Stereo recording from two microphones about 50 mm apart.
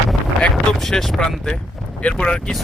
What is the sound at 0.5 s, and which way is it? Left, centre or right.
Speech, centre.